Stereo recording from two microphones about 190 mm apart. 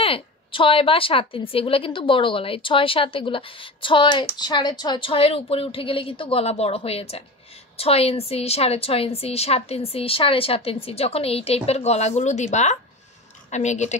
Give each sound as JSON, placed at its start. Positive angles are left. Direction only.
{"t": 0.0, "sound": "a woman's voice", "side_deg": 30}